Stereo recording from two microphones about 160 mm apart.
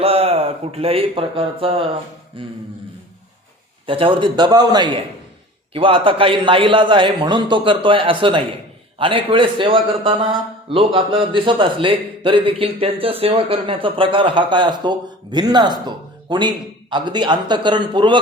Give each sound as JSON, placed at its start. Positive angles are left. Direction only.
{"t": 0.0, "sound": "a man's voice", "side_deg": -40}
{"t": 3.8, "sound": "a man's voice", "side_deg": -35}